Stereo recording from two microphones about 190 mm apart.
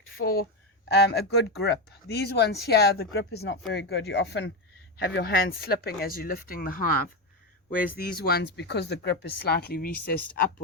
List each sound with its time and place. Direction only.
0.9 s speech: 60° left (ahead or behind)